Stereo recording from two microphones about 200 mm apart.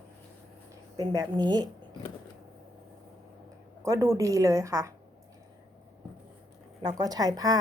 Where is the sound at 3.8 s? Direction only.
15° right (ahead or behind).